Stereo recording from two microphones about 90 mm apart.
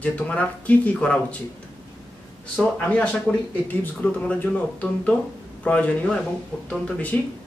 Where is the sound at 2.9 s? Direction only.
15° left (ahead or behind).